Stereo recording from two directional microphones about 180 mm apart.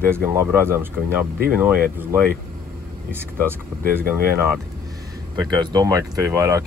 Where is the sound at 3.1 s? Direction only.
10° right (ahead or behind).